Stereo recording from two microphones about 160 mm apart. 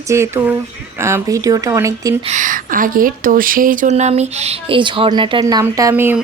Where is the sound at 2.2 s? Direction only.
50° right (ahead or behind); by 5.9 s 25° right (ahead or behind).